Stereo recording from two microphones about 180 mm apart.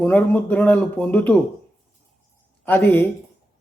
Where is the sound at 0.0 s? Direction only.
10° left (ahead or behind).